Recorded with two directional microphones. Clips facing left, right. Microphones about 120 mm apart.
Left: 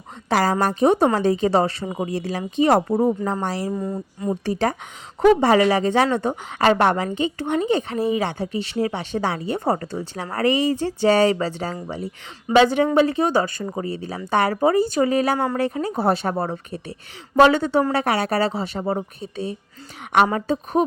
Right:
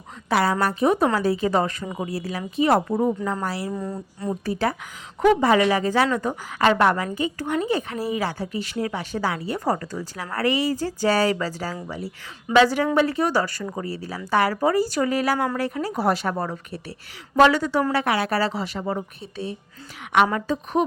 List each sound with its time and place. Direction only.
0.3 s a woman's voice: 35° left (ahead or behind)
2.9 s speech: 10° left (ahead or behind)
3.4 s a woman's voice: 30° left (ahead or behind)
3.8 s speech: 10° left (ahead or behind)
4.4 s a woman's voice: 30° left (ahead or behind)
20.8 s speech: 30° left (ahead or behind)